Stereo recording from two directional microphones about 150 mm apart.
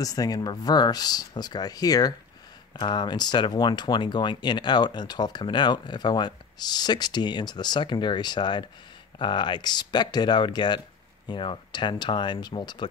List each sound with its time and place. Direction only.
0.0 s speech: 25° left (ahead or behind)